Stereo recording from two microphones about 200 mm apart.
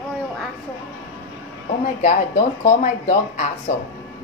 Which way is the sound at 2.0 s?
40° left (ahead or behind).